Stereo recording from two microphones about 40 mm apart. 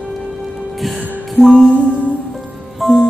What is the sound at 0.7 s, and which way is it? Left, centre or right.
Music, centre.